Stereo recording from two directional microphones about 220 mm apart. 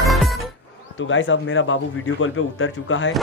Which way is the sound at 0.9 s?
60° left (ahead or behind).